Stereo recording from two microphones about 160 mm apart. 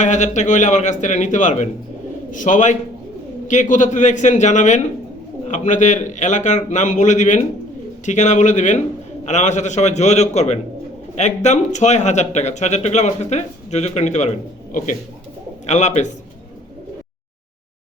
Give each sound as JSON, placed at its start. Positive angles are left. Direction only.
{"t": 0.0, "sound": "speech", "side_deg": 50}
{"t": 15.6, "sound": "speech", "side_deg": 45}